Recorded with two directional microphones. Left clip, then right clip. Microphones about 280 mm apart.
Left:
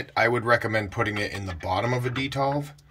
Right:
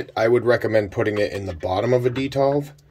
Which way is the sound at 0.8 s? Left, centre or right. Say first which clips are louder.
Right 6 dB; left.